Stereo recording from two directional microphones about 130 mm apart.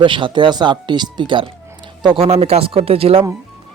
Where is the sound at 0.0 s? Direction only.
40° right (ahead or behind).